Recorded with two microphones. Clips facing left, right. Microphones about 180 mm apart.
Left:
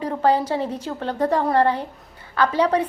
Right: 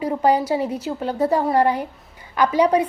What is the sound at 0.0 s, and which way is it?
A woman's voice, 10° right (ahead or behind).